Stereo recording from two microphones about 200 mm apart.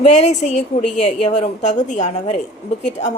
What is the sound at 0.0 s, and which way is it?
A woman's voice, 35° left (ahead or behind).